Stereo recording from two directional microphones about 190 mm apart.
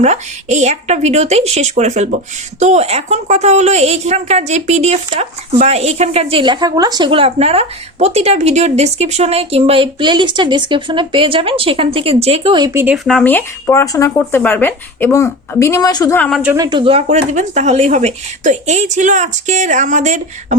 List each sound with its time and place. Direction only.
0.0 s speech: 35° right (ahead or behind); by 13.0 s 10° right (ahead or behind)
13.1 s speech: 5° left (ahead or behind)
16.4 s speech: 10° right (ahead or behind)
16.6 s speech: 25° right (ahead or behind)